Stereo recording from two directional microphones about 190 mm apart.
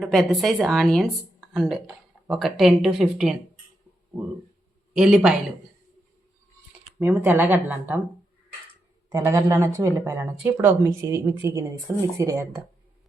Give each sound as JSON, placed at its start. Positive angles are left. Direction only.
{"t": 0.0, "sound": "speech", "side_deg": 0}
{"t": 4.9, "sound": "speech", "side_deg": -5}
{"t": 7.0, "sound": "speech", "side_deg": -10}
{"t": 9.0, "sound": "speech", "side_deg": -15}